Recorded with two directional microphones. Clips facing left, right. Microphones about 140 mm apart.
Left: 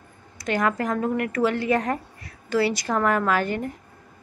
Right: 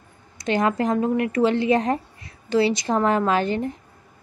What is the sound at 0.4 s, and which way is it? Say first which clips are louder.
Speech: right 3 dB; 25° right (ahead or behind).